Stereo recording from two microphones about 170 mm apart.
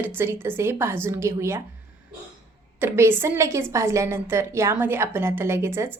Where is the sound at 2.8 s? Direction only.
15° right (ahead or behind).